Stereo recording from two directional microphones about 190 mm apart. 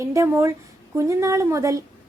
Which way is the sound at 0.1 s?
15° right (ahead or behind).